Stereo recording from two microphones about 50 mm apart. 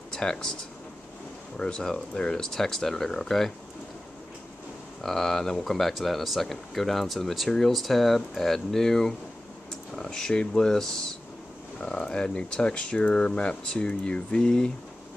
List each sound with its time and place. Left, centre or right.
0.1 s speech: centre
1.6 s speech: centre
5.0 s speech: centre
11.8 s speech: left